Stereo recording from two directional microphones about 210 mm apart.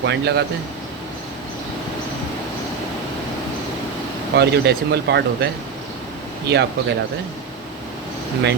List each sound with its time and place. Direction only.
0.0 s speech: 55° right (ahead or behind)
4.4 s speech: 50° right (ahead or behind)
6.5 s speech: 55° right (ahead or behind)